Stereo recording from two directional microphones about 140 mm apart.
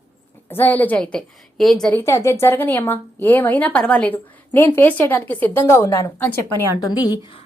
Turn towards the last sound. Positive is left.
turn(degrees=30)  # may be behind; listen again after turning